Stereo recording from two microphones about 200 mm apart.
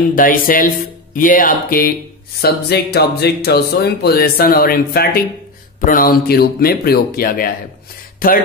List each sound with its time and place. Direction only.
0.1 s speech: 45° left (ahead or behind)